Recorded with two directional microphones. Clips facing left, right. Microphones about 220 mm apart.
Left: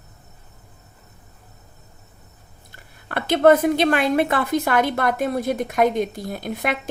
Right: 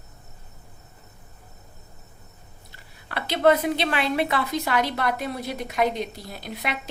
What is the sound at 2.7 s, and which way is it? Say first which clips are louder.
Speech: left 5 dB; 50° left (ahead or behind).